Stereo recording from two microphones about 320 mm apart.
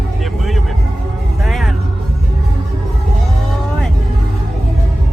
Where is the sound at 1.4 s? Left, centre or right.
Centre.